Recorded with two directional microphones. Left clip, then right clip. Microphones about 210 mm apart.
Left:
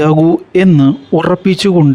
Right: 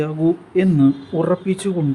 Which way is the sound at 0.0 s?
50° left (ahead or behind).